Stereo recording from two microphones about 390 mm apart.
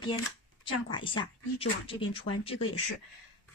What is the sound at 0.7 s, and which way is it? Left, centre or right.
Speech, centre.